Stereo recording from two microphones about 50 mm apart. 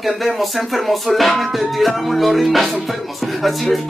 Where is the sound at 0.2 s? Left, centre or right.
Centre.